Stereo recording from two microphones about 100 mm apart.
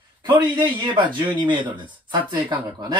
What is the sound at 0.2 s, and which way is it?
A man's voice, 45° right (ahead or behind).